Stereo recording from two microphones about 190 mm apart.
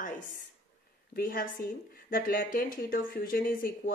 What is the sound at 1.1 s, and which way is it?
A woman's voice, 50° left (ahead or behind).